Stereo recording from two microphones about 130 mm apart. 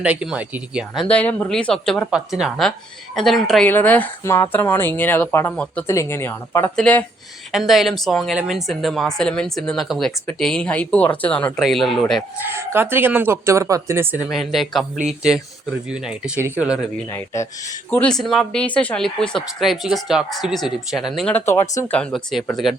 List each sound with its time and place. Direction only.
0.0 s speech: 10° right (ahead or behind)
1.0 s a woman's voice: 10° left (ahead or behind)
2.0 s speech: 5° right (ahead or behind)
3.7 s a woman's voice: 15° left (ahead or behind)
7.5 s speech: centre (ahead or behind)
12.5 s speech: 15° right (ahead or behind)
14.3 s speech: centre (ahead or behind)
17.1 s speech: 20° left (ahead or behind)
18.1 s speech: 5° left (ahead or behind)
21.3 s speech: 20° left (ahead or behind)
21.9 s speech: 5° left (ahead or behind)